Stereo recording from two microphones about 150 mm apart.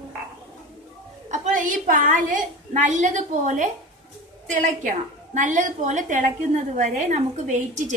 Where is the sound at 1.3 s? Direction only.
60° right (ahead or behind).